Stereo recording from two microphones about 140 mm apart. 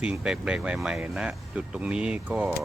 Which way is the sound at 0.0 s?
5° right (ahead or behind).